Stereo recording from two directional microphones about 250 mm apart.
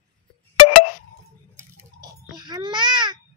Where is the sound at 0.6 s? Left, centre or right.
Left.